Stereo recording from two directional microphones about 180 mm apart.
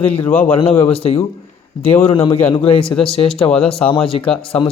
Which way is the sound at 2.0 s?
30° left (ahead or behind).